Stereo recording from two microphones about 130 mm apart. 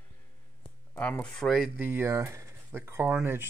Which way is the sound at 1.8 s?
15° right (ahead or behind).